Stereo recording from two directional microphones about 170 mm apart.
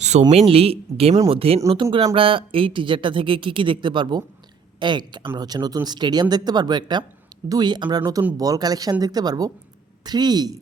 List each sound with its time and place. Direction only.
0.0 s speech: 40° right (ahead or behind); by 10.6 s 25° right (ahead or behind)